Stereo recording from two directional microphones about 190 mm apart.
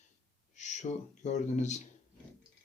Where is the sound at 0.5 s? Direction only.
40° left (ahead or behind).